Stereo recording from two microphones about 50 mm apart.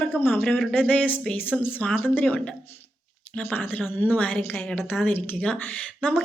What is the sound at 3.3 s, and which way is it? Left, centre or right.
Speech, left.